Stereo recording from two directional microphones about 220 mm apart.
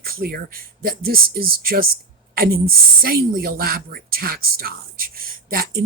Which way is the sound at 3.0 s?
45° right (ahead or behind).